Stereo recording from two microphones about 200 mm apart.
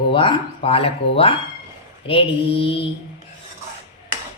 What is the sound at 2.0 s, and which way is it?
Speech, 25° left (ahead or behind).